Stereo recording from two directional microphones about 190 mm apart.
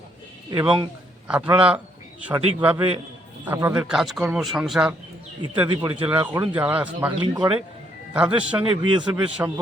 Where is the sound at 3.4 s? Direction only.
10° right (ahead or behind).